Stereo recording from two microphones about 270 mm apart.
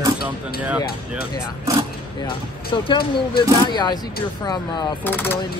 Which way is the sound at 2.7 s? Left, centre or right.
Centre.